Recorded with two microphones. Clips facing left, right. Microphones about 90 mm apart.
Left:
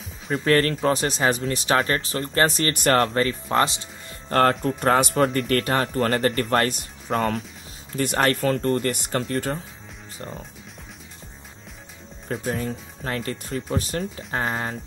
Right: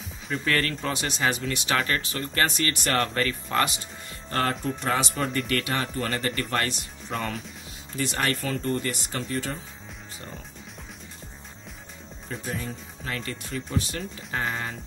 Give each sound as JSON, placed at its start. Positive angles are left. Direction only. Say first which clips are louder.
{"t": 0.3, "sound": "speech", "louder": "left 6 dB", "side_deg": 35}
{"t": 3.5, "sound": "speech", "louder": "left 4 dB", "side_deg": 30}
{"t": 4.3, "sound": "speech", "louder": "left 7 dB", "side_deg": 50}
{"t": 12.3, "sound": "speech", "louder": "left 6 dB", "side_deg": 50}